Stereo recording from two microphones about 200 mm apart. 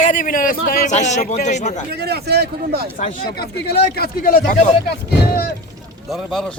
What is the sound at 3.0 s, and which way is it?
Speech, 50° left (ahead or behind).